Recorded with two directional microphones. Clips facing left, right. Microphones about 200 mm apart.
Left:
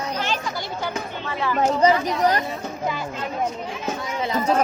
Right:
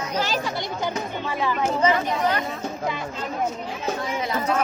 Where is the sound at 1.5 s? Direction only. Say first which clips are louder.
Left 5 dB; 40° left (ahead or behind).